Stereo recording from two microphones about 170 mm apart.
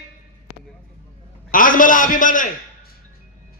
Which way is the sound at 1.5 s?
55° left (ahead or behind).